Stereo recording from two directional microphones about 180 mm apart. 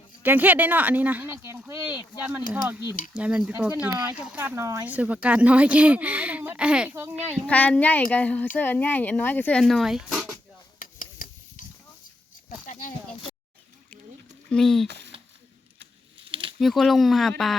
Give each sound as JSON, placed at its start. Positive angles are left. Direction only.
{"t": 0.2, "sound": "speech", "side_deg": -10}
{"t": 7.4, "sound": "speech", "side_deg": 10}
{"t": 10.8, "sound": "stir", "side_deg": 50}
{"t": 12.6, "sound": "a sound", "side_deg": 45}
{"t": 14.5, "sound": "speech", "side_deg": 0}
{"t": 14.8, "sound": "speech", "side_deg": -70}
{"t": 16.2, "sound": "a sound", "side_deg": -30}
{"t": 16.6, "sound": "speech", "side_deg": 0}